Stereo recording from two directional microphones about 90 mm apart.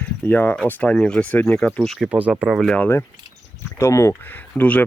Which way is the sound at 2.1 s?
15° right (ahead or behind).